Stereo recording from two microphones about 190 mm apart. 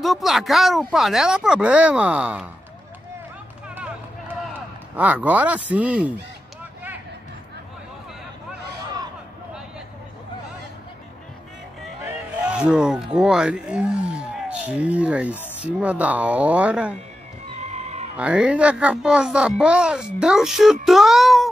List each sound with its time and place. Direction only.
0.0 s a child's voice: centre (ahead or behind)
3.6 s run: 10° right (ahead or behind)
4.9 s speech: 10° right (ahead or behind)
12.1 s speech: 5° right (ahead or behind)
17.6 s music: 35° right (ahead or behind)
18.1 s a child's voice: 5° right (ahead or behind)